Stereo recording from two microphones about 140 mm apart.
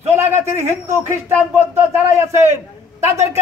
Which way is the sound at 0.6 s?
20° right (ahead or behind).